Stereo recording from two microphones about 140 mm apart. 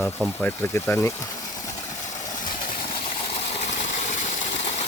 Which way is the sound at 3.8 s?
65° left (ahead or behind).